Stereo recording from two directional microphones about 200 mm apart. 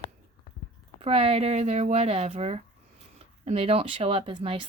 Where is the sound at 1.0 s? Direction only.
30° right (ahead or behind).